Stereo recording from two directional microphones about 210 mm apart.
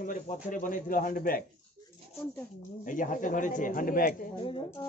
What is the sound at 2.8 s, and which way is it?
A man's voice, 40° left (ahead or behind).